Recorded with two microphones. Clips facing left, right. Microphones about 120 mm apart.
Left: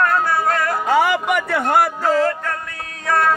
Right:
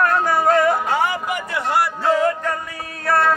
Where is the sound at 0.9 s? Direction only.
90° left; by 1.9 s 50° left (ahead or behind).